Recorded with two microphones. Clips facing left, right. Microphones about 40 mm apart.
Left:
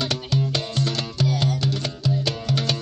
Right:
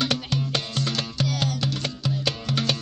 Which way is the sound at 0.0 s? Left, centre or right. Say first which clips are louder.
Left 1 dB; right.